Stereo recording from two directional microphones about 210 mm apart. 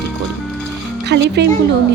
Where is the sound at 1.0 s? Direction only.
55° right (ahead or behind).